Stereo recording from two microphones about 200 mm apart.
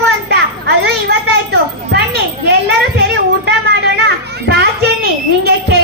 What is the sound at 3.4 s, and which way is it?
Children playing, 55° right (ahead or behind).